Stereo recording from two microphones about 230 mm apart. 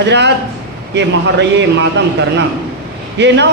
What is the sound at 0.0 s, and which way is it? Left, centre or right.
A man's voice, right.